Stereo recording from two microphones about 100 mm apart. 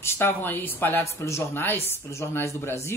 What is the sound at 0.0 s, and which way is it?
Speech, 25° left (ahead or behind).